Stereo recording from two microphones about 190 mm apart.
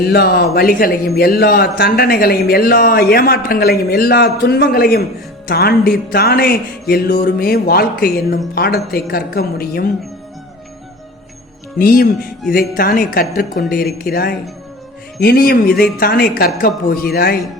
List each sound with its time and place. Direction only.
0.0 s a man's voice: 55° left (ahead or behind)
5.5 s music: 55° left (ahead or behind)
11.8 s music: 50° left (ahead or behind)